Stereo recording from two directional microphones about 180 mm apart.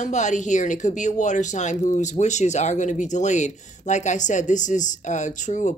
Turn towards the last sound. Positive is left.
turn(degrees=40)  # may be behind; listen again after turning